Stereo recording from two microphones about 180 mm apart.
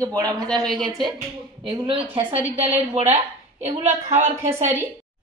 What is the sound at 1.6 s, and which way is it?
A woman's voice, 30° right (ahead or behind).